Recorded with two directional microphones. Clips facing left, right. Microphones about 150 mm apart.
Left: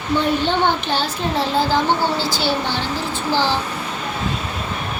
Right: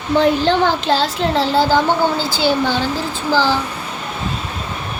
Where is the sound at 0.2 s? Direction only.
90° right.